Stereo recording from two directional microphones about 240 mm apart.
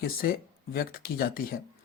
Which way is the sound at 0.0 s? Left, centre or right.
Left.